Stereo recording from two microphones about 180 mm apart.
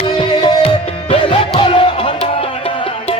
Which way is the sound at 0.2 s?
30° left (ahead or behind).